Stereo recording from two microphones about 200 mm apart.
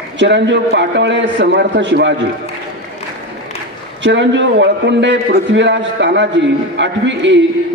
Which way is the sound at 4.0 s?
65° right (ahead or behind).